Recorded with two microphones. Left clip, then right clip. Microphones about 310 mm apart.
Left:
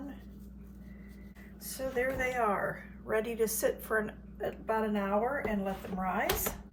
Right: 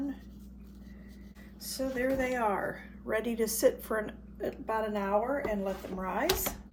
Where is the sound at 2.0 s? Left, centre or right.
Centre.